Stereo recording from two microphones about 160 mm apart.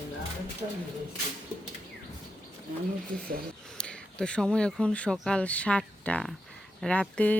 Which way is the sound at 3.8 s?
5° left (ahead or behind).